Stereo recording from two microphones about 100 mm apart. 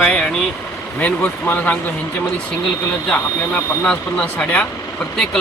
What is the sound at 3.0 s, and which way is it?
Speech, 15° left (ahead or behind).